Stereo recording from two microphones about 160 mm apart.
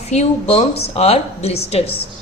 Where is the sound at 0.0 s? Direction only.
45° left (ahead or behind).